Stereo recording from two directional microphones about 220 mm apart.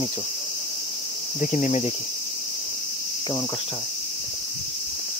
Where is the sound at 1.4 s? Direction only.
35° left (ahead or behind).